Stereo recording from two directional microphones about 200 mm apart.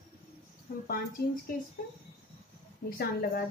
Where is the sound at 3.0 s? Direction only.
50° left (ahead or behind).